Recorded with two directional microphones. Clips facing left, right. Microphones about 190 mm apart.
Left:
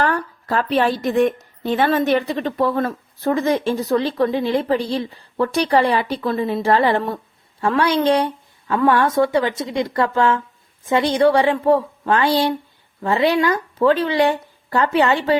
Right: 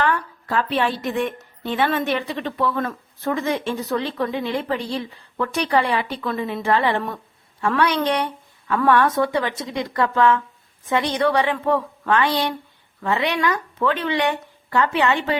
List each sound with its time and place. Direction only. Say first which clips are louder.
0.0 s a woman's voice: left 2 dB; 40° left (ahead or behind)